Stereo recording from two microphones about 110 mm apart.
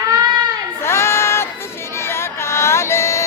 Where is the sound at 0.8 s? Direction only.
25° left (ahead or behind).